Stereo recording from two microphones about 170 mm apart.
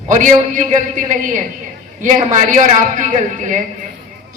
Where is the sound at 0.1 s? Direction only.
50° right (ahead or behind).